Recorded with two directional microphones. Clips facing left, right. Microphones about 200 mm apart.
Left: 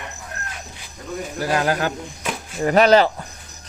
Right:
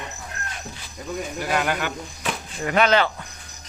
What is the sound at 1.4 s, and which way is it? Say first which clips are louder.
Speech: left 4 dB; 35° left (ahead or behind).